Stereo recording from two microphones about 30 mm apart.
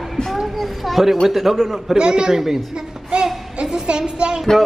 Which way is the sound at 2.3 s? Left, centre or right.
Centre.